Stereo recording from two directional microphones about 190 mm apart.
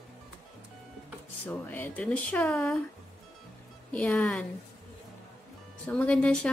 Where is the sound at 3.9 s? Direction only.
5° left (ahead or behind).